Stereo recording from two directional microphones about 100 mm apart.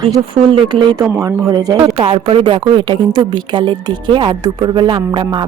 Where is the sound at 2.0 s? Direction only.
65° right (ahead or behind).